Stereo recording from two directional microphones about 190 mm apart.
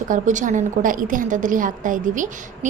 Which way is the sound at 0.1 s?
40° right (ahead or behind).